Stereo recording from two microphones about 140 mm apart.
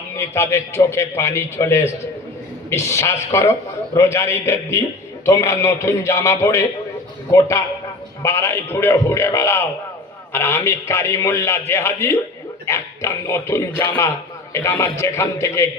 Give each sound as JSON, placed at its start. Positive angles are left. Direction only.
{"t": 0.2, "sound": "a man's voice", "side_deg": 20}